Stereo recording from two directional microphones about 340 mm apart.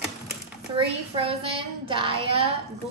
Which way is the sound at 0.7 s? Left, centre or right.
Centre.